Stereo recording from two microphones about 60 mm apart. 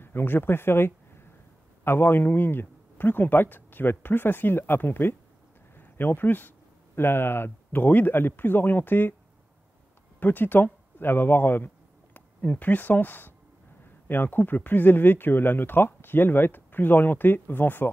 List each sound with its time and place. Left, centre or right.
0.0 s speech: left
10.2 s speech: left